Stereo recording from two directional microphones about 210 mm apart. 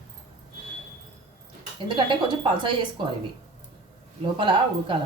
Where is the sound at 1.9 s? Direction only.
25° right (ahead or behind).